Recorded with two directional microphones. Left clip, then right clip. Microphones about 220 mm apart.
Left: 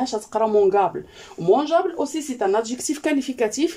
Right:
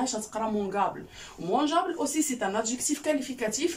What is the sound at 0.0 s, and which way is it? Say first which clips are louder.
A woman's voice: left 9 dB; 50° left (ahead or behind).